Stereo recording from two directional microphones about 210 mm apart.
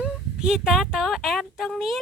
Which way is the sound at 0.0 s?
5° right (ahead or behind).